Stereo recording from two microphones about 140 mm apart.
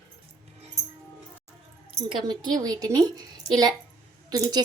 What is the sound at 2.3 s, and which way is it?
A woman's voice, 30° right (ahead or behind).